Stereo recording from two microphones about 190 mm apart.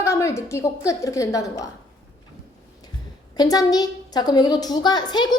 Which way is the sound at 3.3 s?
20° left (ahead or behind).